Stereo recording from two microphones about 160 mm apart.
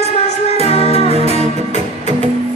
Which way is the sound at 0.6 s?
40° left (ahead or behind).